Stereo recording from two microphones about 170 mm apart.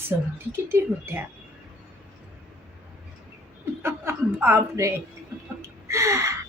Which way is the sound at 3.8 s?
15° right (ahead or behind).